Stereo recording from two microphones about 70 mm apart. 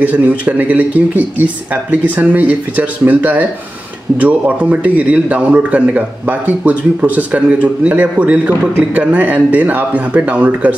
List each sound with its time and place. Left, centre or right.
0.0 s a man's voice: right